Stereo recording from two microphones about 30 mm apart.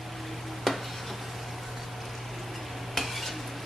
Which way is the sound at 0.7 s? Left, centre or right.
Centre.